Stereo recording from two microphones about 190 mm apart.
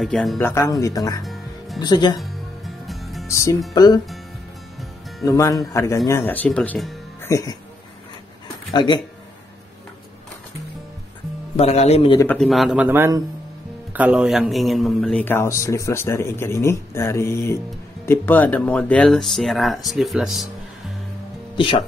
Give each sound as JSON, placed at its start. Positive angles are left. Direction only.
{"t": 0.0, "sound": "speech", "side_deg": 0}
{"t": 0.4, "sound": "speech", "side_deg": 15}
{"t": 1.2, "sound": "music", "side_deg": 0}
{"t": 1.8, "sound": "speech", "side_deg": 20}
{"t": 2.1, "sound": "music", "side_deg": 0}
{"t": 3.3, "sound": "speech", "side_deg": 15}
{"t": 5.2, "sound": "speech", "side_deg": 15}
{"t": 7.2, "sound": "speech", "side_deg": 15}
{"t": 8.7, "sound": "speech", "side_deg": 25}
{"t": 11.5, "sound": "a man's voice", "side_deg": 35}
{"t": 12.4, "sound": "a man's voice", "side_deg": 0}
{"t": 21.5, "sound": "speech", "side_deg": 25}